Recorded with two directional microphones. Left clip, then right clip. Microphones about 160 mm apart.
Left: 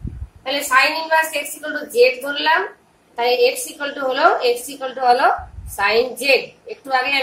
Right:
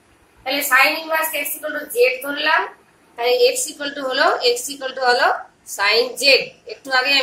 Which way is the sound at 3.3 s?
50° left (ahead or behind).